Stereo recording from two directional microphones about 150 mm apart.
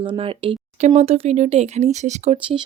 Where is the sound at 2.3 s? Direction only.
35° right (ahead or behind).